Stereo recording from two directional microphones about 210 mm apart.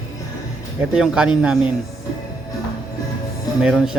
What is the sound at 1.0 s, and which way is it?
Speech, 5° right (ahead or behind).